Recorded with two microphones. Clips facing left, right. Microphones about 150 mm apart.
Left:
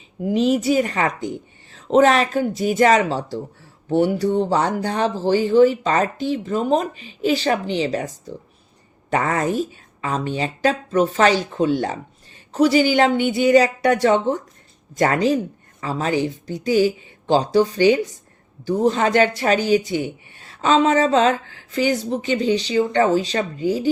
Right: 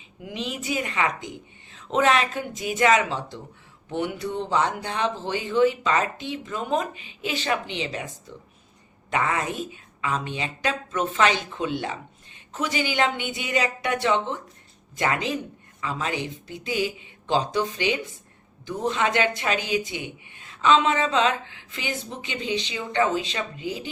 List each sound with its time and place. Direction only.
0.2 s speech: 40° left (ahead or behind)